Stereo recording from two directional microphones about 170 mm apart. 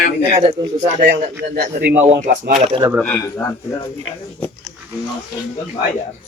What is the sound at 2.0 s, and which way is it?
Speech, 45° right (ahead or behind).